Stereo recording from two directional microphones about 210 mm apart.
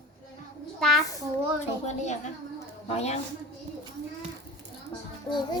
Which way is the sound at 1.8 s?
35° left (ahead or behind).